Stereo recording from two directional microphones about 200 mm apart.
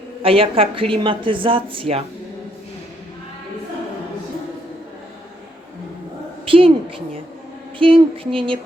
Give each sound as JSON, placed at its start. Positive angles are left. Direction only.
{"t": 0.2, "sound": "speech", "side_deg": -30}
{"t": 6.4, "sound": "a sound", "side_deg": -25}
{"t": 7.8, "sound": "speech", "side_deg": -25}